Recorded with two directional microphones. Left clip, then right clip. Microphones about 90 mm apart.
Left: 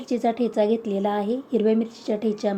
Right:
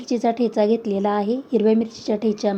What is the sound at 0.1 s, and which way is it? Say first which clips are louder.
A woman's voice: right 3 dB; 35° right (ahead or behind).